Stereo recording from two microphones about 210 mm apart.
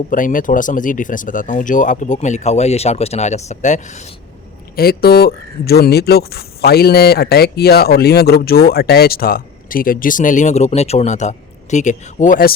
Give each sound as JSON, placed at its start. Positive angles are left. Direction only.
{"t": 0.1, "sound": "speech", "side_deg": 40}
{"t": 4.8, "sound": "speech", "side_deg": 45}